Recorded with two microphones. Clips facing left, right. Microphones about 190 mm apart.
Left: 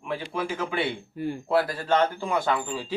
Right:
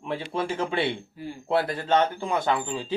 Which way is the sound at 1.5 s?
25° right (ahead or behind).